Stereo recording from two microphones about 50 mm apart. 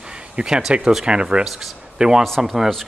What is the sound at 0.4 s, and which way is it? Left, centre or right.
Speech, right.